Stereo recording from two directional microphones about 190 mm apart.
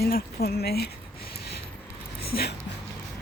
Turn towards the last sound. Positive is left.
turn(degrees=55)  # may be behind; listen again after turning